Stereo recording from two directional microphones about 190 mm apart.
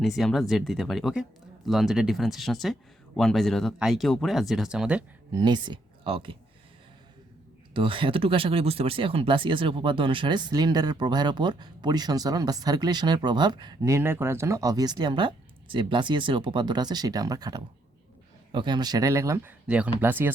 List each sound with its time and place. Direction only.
0.0 s speech: centre (ahead or behind)
5.3 s speech: 25° right (ahead or behind)
7.7 s speech: 25° right (ahead or behind); by 20.3 s 10° right (ahead or behind)